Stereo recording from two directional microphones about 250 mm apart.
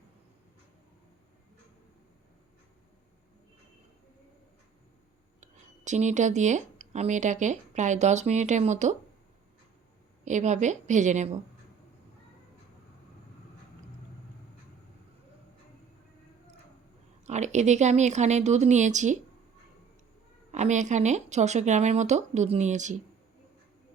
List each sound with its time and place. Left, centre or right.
5.4 s speech: right
10.2 s speech: right
17.2 s speech: right
20.5 s speech: right